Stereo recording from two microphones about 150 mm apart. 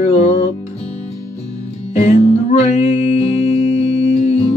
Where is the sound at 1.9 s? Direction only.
50° left (ahead or behind).